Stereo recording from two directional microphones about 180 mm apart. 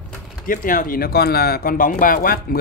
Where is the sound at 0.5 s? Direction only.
50° left (ahead or behind).